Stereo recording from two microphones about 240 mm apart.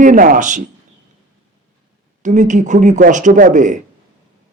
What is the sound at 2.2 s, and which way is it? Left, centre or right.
Speech, right.